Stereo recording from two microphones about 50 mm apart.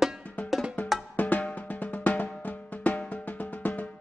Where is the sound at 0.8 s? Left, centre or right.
Left.